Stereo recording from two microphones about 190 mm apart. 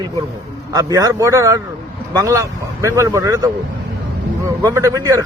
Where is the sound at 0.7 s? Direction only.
20° right (ahead or behind).